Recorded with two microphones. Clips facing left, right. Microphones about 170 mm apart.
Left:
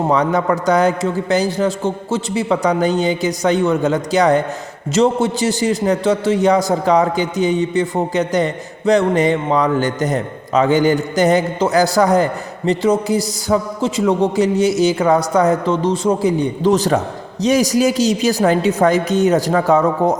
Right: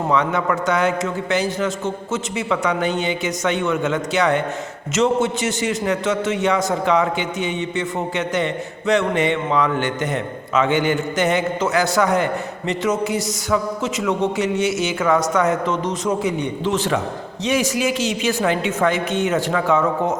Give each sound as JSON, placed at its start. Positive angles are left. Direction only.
{"t": 0.1, "sound": "a man's voice", "side_deg": 35}